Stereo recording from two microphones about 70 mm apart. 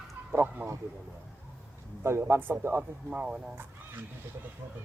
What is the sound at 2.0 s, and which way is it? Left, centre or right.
Speech, right.